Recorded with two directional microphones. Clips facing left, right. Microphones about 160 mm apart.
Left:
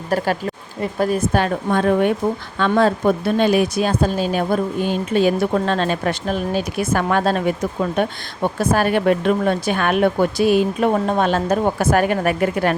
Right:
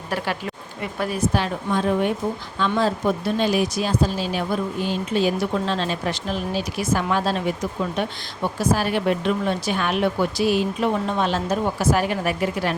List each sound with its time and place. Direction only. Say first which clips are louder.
0.1 s speech: left 6 dB; 40° left (ahead or behind)